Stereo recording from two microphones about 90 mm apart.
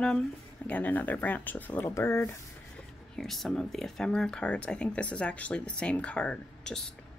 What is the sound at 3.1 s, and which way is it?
Speech, centre (ahead or behind).